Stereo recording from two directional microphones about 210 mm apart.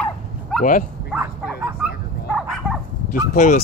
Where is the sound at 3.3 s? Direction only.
35° left (ahead or behind).